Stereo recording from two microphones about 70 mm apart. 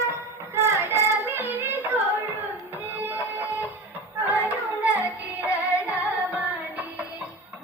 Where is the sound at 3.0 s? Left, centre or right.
Right.